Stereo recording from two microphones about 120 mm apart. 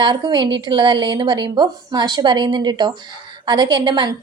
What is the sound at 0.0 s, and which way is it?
A woman's voice, 35° right (ahead or behind).